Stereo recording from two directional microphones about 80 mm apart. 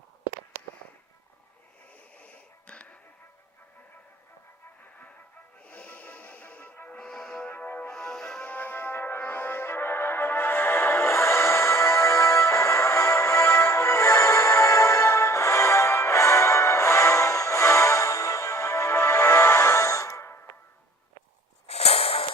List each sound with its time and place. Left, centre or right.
2.1 s a sound: centre
5.6 s music: centre
7.5 s music: left
7.9 s music: centre
8.4 s music: left